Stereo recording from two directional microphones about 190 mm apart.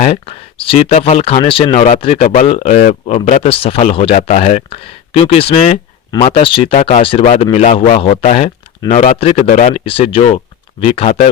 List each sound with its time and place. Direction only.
0.0 s speech: 35° left (ahead or behind)